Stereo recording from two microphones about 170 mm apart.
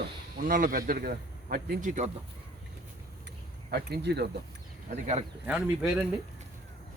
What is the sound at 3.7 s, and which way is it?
Speech, 70° right (ahead or behind).